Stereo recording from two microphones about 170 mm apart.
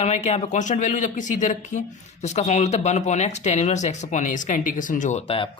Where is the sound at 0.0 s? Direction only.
40° left (ahead or behind).